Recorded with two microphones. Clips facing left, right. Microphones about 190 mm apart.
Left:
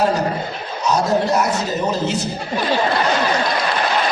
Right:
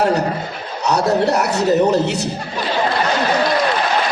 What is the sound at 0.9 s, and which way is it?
A man's voice, 65° right (ahead or behind).